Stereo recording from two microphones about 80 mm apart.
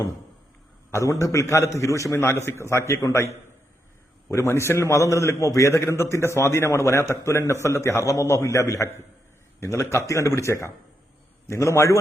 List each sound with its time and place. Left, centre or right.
0.9 s a man's voice: left